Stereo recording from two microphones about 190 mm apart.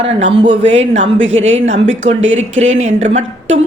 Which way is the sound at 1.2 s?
85° right.